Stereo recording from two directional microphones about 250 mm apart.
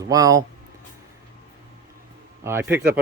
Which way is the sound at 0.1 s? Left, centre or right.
Centre.